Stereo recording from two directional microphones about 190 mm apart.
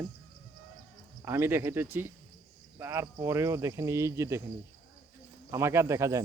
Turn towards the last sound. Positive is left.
turn(degrees=-15)  # may be behind; listen again after turning